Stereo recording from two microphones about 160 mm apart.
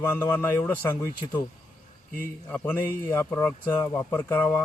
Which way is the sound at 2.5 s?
10° left (ahead or behind).